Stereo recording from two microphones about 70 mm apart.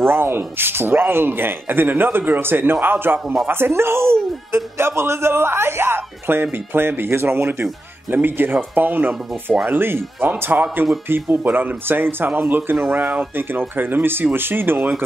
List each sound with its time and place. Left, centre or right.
0.0 s a man's voice: right
13.0 s speech: centre
13.4 s a man's voice: right